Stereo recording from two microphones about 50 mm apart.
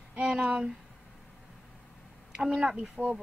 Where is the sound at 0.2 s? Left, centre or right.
Centre.